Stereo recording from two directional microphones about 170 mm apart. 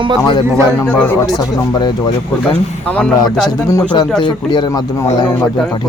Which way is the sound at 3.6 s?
15° left (ahead or behind).